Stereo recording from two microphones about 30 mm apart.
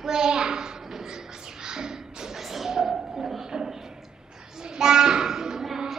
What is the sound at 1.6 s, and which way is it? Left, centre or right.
Music, right.